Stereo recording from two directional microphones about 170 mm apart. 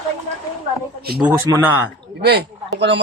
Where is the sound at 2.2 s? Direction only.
75° right (ahead or behind).